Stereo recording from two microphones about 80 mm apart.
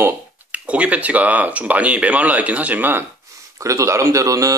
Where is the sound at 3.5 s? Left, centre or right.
Right.